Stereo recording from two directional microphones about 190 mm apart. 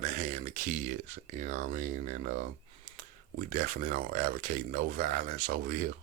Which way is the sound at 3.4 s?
45° right (ahead or behind).